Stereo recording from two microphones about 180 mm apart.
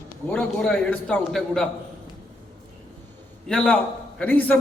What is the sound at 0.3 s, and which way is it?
A man's voice, 5° left (ahead or behind).